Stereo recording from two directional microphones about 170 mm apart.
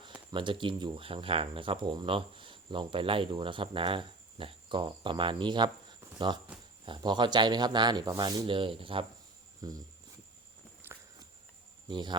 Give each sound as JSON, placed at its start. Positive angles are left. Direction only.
{"t": 0.0, "sound": "speech", "side_deg": -25}
{"t": 11.9, "sound": "speech", "side_deg": -25}